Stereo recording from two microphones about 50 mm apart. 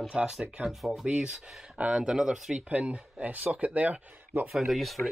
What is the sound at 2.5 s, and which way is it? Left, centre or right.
Speech, right.